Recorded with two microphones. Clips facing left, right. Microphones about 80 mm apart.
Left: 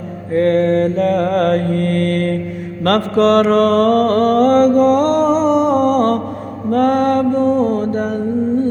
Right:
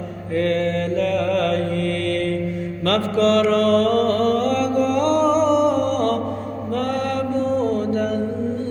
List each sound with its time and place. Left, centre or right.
0.3 s mantra: left